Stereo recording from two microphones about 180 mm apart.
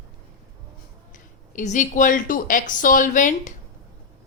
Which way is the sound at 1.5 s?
45° left (ahead or behind).